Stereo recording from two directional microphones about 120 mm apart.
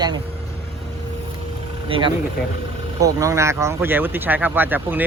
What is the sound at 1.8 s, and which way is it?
Speech, 45° right (ahead or behind).